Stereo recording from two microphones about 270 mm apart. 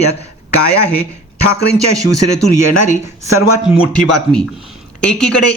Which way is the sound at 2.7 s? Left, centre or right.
Left.